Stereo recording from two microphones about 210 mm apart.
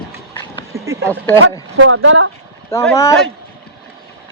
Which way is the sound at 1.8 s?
70° right (ahead or behind).